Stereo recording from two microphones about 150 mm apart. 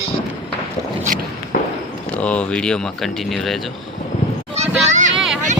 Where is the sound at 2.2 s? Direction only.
10° left (ahead or behind).